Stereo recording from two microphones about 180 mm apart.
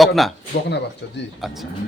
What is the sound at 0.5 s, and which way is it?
Speech, 70° left (ahead or behind).